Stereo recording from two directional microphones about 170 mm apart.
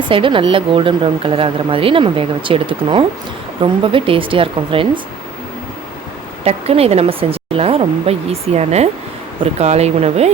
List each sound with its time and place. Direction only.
0.1 s speech: 30° right (ahead or behind)
6.4 s speech: 35° right (ahead or behind)